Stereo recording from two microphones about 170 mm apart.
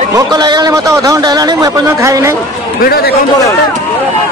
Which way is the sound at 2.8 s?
60° left (ahead or behind).